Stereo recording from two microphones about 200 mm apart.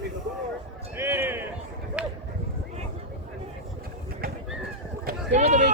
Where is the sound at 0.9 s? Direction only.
10° right (ahead or behind).